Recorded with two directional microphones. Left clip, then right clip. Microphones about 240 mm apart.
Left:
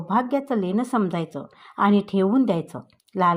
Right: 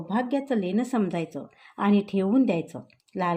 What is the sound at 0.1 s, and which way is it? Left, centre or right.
Speech, left.